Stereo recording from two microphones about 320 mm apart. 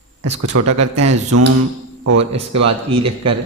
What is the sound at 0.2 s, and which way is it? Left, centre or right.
Speech, right.